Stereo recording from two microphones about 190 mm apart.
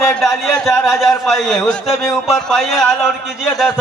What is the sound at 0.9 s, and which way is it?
A man's voice, centre (ahead or behind).